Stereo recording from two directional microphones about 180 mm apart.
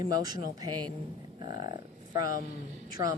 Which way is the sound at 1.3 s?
25° right (ahead or behind).